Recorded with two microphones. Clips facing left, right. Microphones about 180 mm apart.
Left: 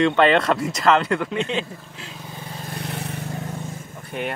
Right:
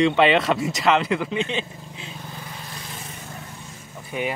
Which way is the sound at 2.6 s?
60° left (ahead or behind).